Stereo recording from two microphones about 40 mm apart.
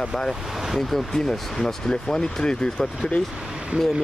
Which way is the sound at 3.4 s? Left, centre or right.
Right.